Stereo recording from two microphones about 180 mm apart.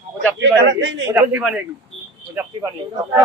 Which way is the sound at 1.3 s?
5° right (ahead or behind).